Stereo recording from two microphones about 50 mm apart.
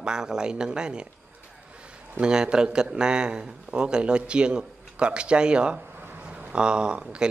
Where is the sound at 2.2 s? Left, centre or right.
Centre.